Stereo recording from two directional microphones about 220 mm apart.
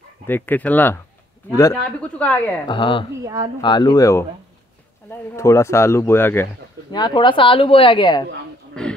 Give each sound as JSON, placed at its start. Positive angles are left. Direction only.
{"t": 0.3, "sound": "speech", "side_deg": 5}
{"t": 2.7, "sound": "speech", "side_deg": 20}
{"t": 8.8, "sound": "a sound", "side_deg": 5}